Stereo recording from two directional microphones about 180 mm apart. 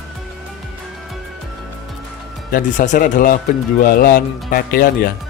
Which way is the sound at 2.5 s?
45° left (ahead or behind).